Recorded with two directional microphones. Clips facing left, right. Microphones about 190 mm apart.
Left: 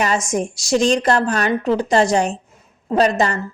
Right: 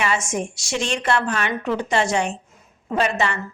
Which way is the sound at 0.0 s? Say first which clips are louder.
Left 4 dB; 40° left (ahead or behind).